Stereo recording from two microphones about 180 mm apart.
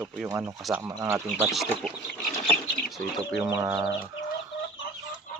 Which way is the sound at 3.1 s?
Centre (ahead or behind).